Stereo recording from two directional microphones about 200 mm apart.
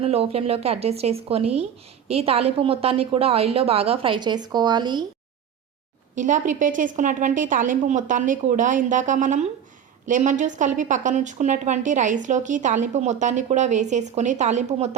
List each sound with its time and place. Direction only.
0.0 s a woman's voice: 30° right (ahead or behind)
6.1 s a woman's voice: 40° right (ahead or behind)